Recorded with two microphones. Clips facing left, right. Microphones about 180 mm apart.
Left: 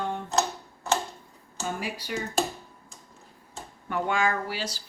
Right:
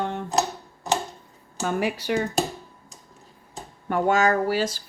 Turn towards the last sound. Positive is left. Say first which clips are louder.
# right 9 dB
turn(degrees=-50)  # may be behind; listen again after turning